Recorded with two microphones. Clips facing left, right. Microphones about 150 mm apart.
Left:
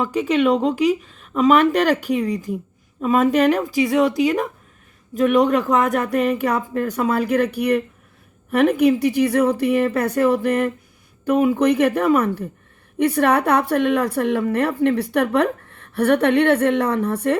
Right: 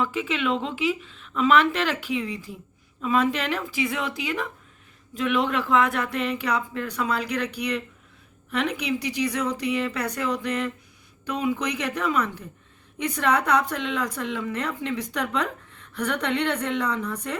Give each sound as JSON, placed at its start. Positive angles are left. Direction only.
{"t": 0.0, "sound": "a woman's voice", "side_deg": 40}